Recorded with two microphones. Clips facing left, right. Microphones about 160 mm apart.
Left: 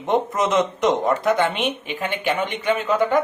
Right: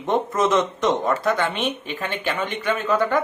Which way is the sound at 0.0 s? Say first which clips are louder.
Even; 20° left (ahead or behind).